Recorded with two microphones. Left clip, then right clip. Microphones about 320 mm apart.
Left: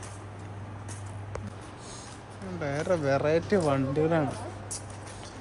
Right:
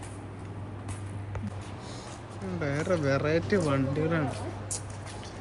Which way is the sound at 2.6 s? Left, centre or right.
Centre.